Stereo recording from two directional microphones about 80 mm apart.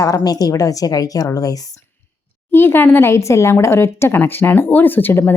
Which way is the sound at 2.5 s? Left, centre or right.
Left.